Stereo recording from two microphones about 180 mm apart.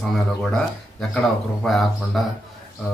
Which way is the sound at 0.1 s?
5° left (ahead or behind).